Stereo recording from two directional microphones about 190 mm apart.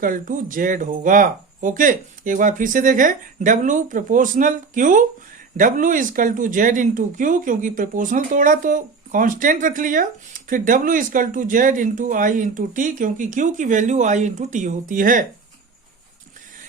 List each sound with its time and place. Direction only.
0.0 s speech: 45° right (ahead or behind)